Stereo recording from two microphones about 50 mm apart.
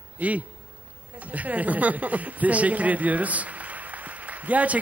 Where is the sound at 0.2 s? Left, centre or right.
Right.